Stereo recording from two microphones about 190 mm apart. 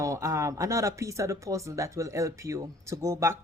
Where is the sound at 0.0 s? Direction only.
15° right (ahead or behind).